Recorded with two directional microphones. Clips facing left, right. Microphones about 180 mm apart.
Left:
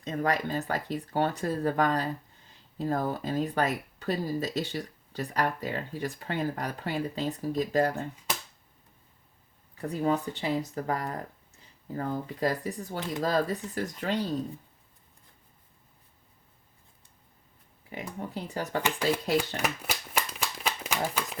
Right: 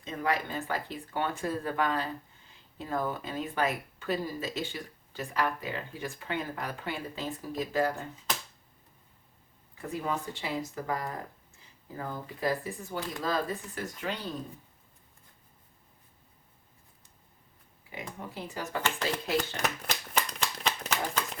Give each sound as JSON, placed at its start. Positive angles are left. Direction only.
{"t": 0.0, "sound": "speech", "side_deg": 40}
{"t": 9.9, "sound": "speech", "side_deg": 35}
{"t": 11.9, "sound": "speech", "side_deg": 40}
{"t": 17.9, "sound": "speech", "side_deg": 40}
{"t": 18.8, "sound": "speech", "side_deg": 10}
{"t": 19.5, "sound": "shuffling cards", "side_deg": 5}